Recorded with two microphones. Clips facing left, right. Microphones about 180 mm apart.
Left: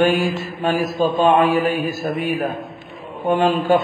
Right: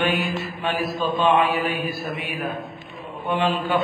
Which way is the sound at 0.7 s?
45° left (ahead or behind).